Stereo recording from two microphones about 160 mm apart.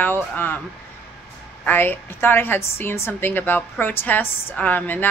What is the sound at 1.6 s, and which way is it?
Speech, 10° left (ahead or behind).